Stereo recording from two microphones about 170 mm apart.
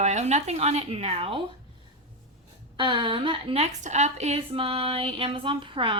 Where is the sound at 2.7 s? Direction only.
30° right (ahead or behind).